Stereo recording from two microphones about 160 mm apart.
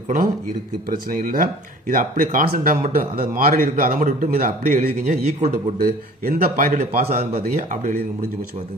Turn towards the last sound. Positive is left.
turn(degrees=-50)  # may be behind; listen again after turning